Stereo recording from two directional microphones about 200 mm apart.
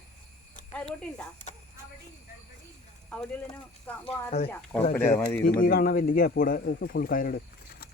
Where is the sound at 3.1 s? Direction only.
10° left (ahead or behind).